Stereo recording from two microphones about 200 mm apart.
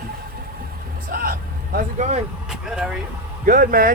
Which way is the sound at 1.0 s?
45° right (ahead or behind).